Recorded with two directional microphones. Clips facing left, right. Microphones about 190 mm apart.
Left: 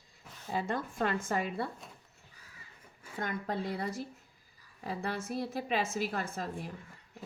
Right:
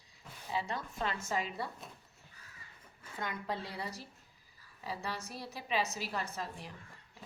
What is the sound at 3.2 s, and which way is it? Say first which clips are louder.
A woman's voice: left 4 dB; 50° left (ahead or behind).